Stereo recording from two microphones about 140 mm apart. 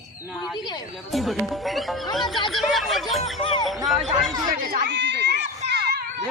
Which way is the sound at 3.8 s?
Centre (ahead or behind).